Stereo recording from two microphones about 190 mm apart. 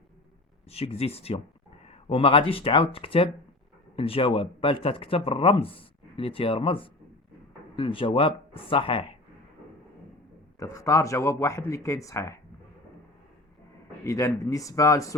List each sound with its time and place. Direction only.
0.7 s speech: 30° left (ahead or behind)
10.6 s speech: 15° left (ahead or behind)
14.0 s speech: 15° left (ahead or behind)